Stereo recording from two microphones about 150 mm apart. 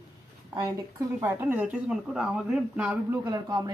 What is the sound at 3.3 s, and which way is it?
Speech, 25° right (ahead or behind).